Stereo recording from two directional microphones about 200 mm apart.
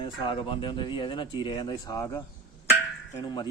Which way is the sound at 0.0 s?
25° left (ahead or behind).